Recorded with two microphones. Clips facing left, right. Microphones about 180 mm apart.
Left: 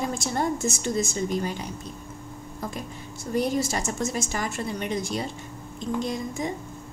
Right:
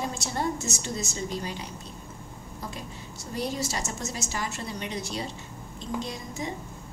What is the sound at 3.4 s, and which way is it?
A woman's voice, 50° left (ahead or behind).